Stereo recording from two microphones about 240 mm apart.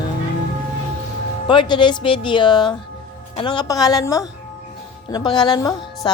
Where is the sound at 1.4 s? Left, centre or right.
Centre.